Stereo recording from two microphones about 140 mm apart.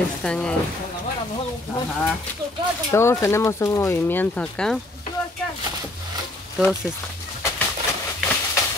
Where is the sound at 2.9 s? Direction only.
20° left (ahead or behind).